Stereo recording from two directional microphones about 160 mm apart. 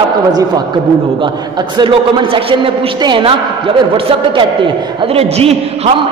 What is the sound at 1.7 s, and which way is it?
A man's voice, 30° right (ahead or behind).